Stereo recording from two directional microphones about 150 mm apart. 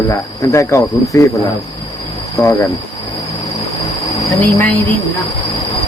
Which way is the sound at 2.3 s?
15° left (ahead or behind).